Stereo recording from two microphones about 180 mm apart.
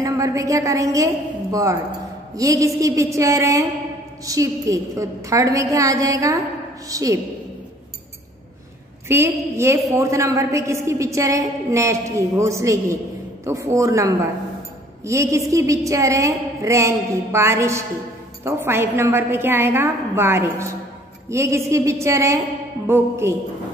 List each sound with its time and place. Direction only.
0.0 s a woman's voice: 20° right (ahead or behind)
9.0 s a woman's voice: 15° right (ahead or behind)